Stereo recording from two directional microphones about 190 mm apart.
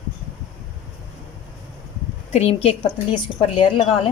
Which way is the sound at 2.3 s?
30° left (ahead or behind).